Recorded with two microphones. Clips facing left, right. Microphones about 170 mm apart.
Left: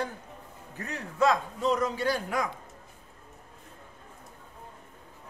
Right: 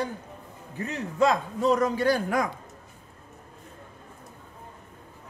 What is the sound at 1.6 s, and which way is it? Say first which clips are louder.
Speech: right 5 dB; 45° right (ahead or behind).